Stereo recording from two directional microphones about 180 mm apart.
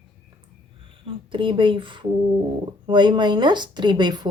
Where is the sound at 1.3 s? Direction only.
30° right (ahead or behind).